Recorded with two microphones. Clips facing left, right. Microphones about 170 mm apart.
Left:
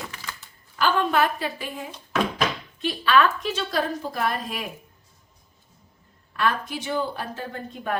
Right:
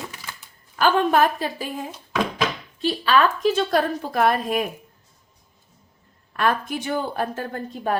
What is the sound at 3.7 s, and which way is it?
Speech, 60° right (ahead or behind).